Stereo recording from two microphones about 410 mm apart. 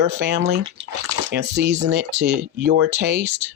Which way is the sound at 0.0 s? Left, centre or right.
Right.